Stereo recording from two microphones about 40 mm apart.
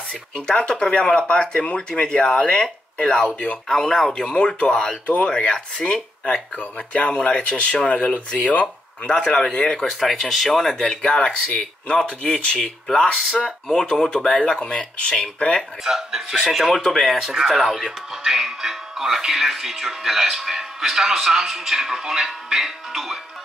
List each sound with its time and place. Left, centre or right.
0.5 s speech: left
9.1 s speech: left
9.4 s speech: centre
10.8 s speech: left
15.8 s speech: centre
16.7 s speech: centre
17.0 s speech: centre